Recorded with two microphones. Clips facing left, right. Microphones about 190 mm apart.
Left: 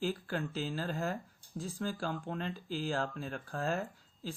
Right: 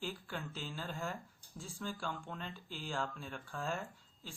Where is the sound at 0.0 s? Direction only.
40° left (ahead or behind).